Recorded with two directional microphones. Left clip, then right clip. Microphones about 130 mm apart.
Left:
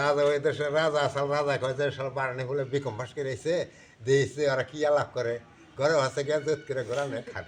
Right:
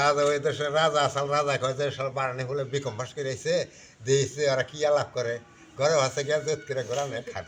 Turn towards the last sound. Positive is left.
turn(degrees=15)  # may be behind; listen again after turning